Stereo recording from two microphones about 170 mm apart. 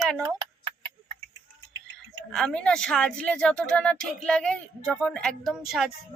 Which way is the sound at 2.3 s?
5° left (ahead or behind).